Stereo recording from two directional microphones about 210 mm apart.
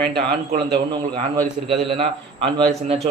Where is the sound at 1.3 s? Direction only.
30° right (ahead or behind).